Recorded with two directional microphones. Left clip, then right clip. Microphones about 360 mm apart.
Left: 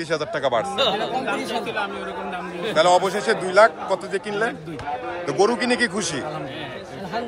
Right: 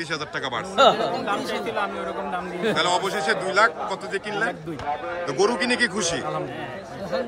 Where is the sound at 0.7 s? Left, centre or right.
Right.